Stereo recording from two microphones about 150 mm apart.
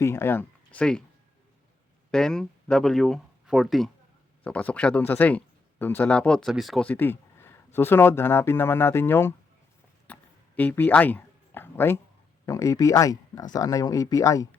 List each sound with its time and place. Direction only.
0.0 s speech: 15° left (ahead or behind)
2.0 s speech: 5° left (ahead or behind)
10.1 s a sound: 10° left (ahead or behind)
12.5 s speech: 20° left (ahead or behind)